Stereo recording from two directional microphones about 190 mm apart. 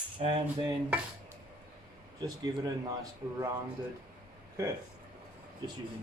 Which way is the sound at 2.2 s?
20° right (ahead or behind).